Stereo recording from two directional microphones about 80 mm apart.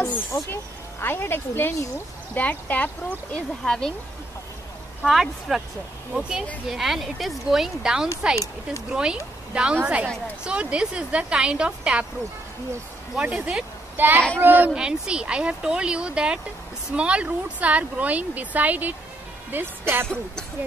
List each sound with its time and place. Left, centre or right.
0.0 s speech: left; by 3.9 s centre
5.0 s speech: centre
13.1 s speech: centre
13.9 s speech: right
14.7 s speech: centre; by 20.1 s right